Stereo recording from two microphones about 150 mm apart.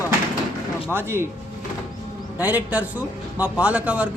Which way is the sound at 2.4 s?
10° right (ahead or behind).